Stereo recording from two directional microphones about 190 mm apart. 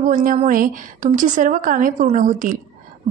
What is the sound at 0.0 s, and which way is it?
A woman's voice, 45° right (ahead or behind).